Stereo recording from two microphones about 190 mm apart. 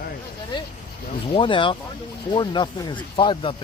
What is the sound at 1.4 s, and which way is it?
Speech, 25° left (ahead or behind).